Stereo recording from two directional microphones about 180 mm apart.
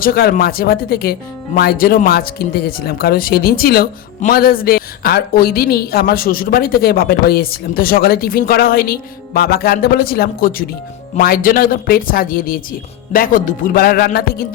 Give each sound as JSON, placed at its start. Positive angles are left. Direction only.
{"t": 0.0, "sound": "speech", "side_deg": 55}